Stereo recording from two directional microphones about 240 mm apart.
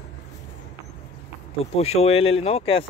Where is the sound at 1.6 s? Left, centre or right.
Left.